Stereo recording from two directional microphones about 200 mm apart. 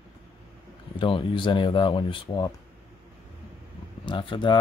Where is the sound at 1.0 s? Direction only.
25° left (ahead or behind).